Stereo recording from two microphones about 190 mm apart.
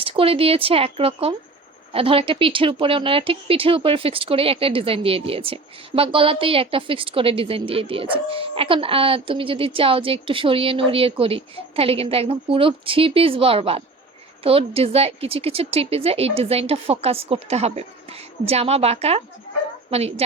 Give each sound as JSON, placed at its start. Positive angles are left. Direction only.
{"t": 0.0, "sound": "a woman's voice", "side_deg": -30}